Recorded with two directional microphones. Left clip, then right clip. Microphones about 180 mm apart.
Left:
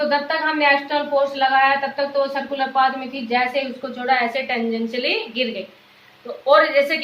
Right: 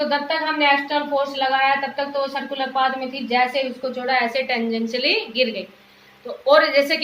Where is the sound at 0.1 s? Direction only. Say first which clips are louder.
Left 2 dB; 15° right (ahead or behind).